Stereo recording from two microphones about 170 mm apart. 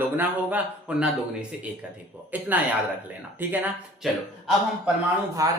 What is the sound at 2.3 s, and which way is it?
A man's voice, 10° right (ahead or behind).